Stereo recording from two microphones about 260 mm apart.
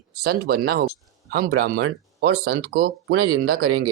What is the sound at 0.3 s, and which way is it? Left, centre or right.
Speech, right.